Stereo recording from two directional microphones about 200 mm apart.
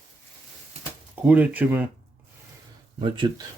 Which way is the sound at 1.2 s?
10° right (ahead or behind).